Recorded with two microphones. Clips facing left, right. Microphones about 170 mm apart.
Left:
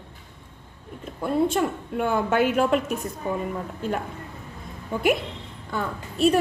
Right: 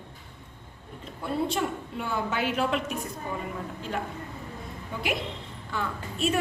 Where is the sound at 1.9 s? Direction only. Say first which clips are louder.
Left 8 dB; 55° left (ahead or behind).